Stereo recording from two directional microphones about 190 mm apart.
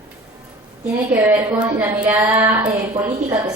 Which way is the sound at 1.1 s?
10° right (ahead or behind).